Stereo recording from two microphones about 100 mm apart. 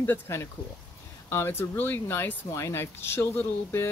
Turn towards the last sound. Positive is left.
turn(degrees=25)  # may be behind; listen again after turning